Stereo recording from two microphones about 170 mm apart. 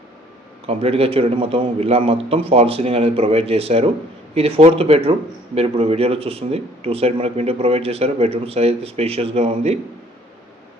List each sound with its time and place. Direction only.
0.7 s speech: 35° right (ahead or behind)